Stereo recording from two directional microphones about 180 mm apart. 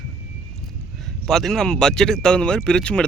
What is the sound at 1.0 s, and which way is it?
Speech, centre (ahead or behind).